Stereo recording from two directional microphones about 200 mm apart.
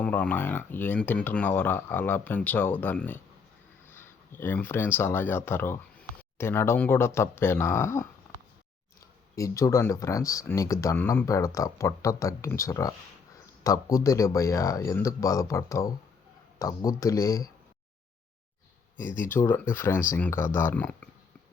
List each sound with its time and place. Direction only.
0.0 s speech: 5° left (ahead or behind)
9.3 s speech: 15° left (ahead or behind)
19.3 s speech: 10° left (ahead or behind)